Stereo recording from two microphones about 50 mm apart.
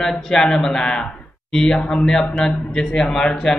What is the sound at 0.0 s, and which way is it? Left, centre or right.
A man's voice, centre.